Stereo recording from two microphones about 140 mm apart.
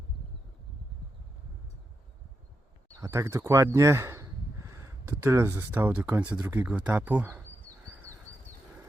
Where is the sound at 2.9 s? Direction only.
20° right (ahead or behind).